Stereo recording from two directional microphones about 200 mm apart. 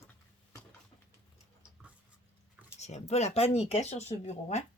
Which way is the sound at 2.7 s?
35° left (ahead or behind).